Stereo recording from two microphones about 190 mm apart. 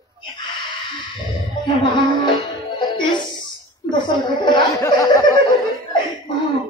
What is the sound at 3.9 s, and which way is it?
A man's voice, 25° left (ahead or behind).